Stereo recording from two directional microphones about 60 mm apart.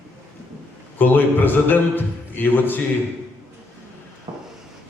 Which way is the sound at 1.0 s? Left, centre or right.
Left.